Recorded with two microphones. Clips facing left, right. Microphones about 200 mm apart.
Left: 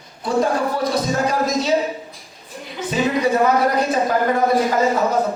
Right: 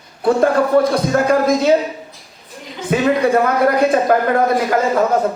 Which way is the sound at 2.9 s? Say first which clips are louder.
Right 4 dB; 60° right (ahead or behind).